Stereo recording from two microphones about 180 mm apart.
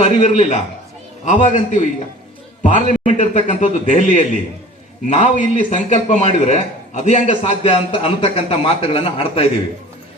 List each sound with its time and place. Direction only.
0.0 s a man's voice: 40° left (ahead or behind)